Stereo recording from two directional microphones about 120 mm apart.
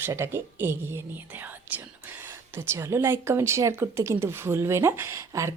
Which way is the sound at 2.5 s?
20° right (ahead or behind).